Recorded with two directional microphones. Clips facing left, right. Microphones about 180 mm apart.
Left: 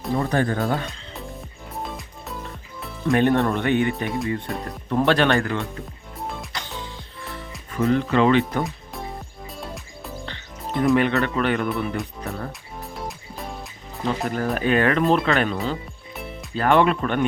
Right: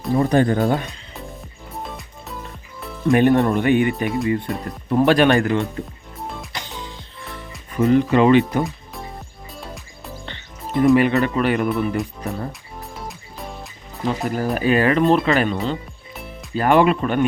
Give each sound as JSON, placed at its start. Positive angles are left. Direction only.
{"t": 0.2, "sound": "speech", "side_deg": -20}
{"t": 1.7, "sound": "music", "side_deg": 0}
{"t": 3.1, "sound": "speech", "side_deg": -10}
{"t": 4.9, "sound": "speech", "side_deg": -10}
{"t": 6.1, "sound": "music", "side_deg": 0}
{"t": 7.8, "sound": "speech", "side_deg": -15}
{"t": 8.6, "sound": "music", "side_deg": 0}
{"t": 14.2, "sound": "speech", "side_deg": -5}